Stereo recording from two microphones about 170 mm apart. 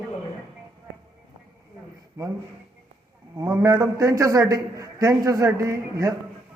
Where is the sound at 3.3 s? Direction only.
20° right (ahead or behind).